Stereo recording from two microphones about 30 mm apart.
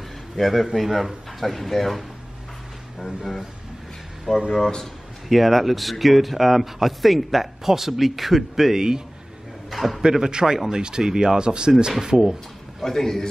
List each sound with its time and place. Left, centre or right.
0.4 s speech: centre
4.3 s speech: centre
8.7 s speech: right
9.7 s a man's voice: centre
10.0 s speech: right
12.8 s a man's voice: centre